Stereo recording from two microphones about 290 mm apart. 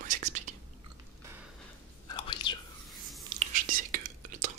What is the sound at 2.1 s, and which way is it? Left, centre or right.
Chewing, centre.